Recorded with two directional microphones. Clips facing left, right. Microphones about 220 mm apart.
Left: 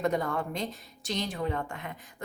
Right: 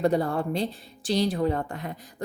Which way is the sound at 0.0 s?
35° right (ahead or behind).